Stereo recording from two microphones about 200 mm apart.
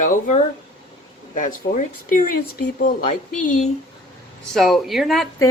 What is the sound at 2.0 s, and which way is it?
Speech, 45° left (ahead or behind).